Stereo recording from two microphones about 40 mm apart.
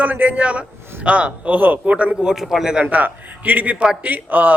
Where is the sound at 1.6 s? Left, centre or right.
Right.